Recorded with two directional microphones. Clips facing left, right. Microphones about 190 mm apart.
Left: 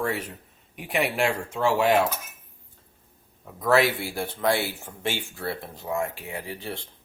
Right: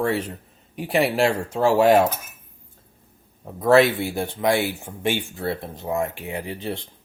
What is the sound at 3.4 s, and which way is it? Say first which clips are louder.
Speech: right 5 dB; 30° right (ahead or behind).